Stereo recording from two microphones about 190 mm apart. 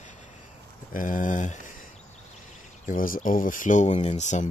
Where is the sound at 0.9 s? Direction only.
45° left (ahead or behind).